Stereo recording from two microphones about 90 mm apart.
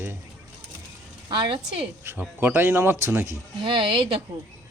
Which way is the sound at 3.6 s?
65° right (ahead or behind).